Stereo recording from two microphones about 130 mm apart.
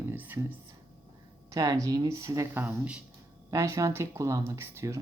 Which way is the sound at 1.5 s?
25° right (ahead or behind).